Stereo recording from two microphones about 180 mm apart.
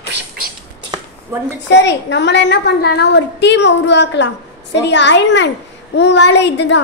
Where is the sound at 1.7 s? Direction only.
75° left (ahead or behind).